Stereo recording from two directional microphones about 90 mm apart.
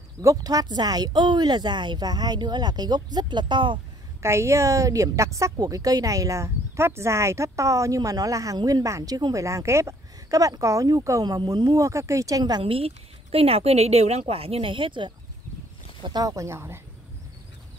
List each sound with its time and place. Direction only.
0.2 s speech: 40° right (ahead or behind); by 3.8 s 60° right (ahead or behind)
4.2 s a woman's voice: 30° right (ahead or behind)
8.5 s speech: 50° right (ahead or behind)
8.8 s a woman's voice: 40° right (ahead or behind)
12.6 s speech: 90° right; by 15.1 s 65° right (ahead or behind)
16.2 s speech: 40° right (ahead or behind)